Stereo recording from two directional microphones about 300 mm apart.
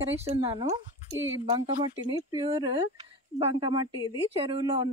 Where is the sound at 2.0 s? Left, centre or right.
Centre.